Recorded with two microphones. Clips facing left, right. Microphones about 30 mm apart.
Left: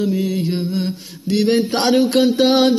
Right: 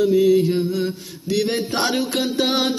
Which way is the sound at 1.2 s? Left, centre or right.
Left.